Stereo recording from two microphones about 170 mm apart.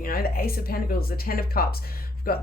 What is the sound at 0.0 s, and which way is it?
Speech, 60° left (ahead or behind).